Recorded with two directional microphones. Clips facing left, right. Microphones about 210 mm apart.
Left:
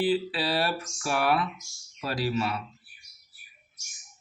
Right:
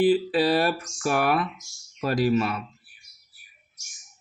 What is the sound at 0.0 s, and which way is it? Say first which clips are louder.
A man's voice: right 6 dB; 50° right (ahead or behind).